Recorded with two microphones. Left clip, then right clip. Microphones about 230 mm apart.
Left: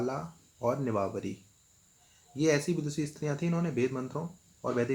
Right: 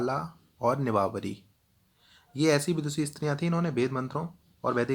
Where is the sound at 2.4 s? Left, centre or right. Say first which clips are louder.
Right 3 dB; right.